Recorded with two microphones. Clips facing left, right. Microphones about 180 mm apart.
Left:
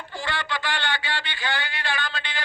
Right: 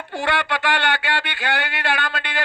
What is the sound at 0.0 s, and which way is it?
Speech, 70° right (ahead or behind).